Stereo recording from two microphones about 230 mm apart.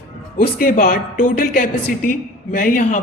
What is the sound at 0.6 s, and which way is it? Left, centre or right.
Speech, left.